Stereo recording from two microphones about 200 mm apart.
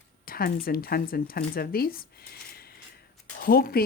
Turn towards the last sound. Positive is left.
turn(degrees=50)  # may be behind; listen again after turning